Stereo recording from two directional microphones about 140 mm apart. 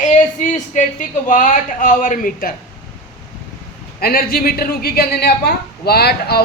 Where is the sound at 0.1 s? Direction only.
60° left (ahead or behind); by 2.6 s 80° left.